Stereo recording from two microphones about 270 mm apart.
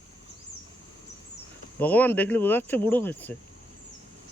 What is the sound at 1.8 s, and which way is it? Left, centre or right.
Speech, centre.